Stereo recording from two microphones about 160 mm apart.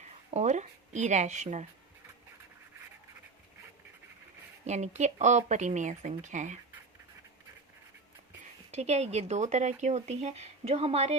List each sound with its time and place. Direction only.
0.0 s speech: 45° right (ahead or behind)
4.6 s speech: 45° right (ahead or behind)
8.7 s speech: 45° right (ahead or behind)